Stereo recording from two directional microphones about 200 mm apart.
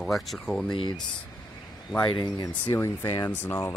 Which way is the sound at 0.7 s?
25° left (ahead or behind).